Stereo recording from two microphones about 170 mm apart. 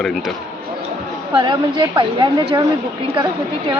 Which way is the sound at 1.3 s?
25° right (ahead or behind).